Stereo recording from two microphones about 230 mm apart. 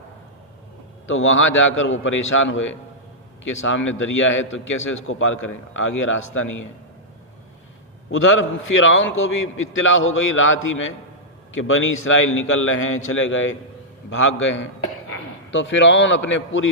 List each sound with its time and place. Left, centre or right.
1.0 s a man's voice: left
8.1 s a man's voice: left